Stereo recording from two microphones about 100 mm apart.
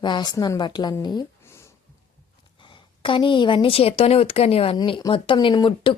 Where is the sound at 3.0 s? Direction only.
55° left (ahead or behind); by 4.7 s 85° left.